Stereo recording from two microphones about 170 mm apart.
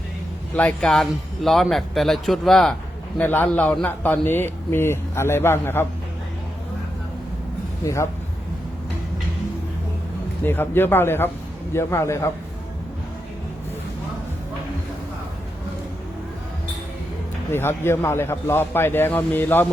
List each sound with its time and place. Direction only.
0.5 s a man's voice: 5° left (ahead or behind)
10.4 s a man's voice: 10° left (ahead or behind)
17.5 s a man's voice: 15° left (ahead or behind)